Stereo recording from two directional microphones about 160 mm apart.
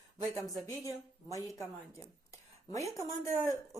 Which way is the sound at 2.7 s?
20° left (ahead or behind).